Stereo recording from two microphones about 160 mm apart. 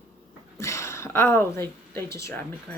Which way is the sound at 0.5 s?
20° left (ahead or behind).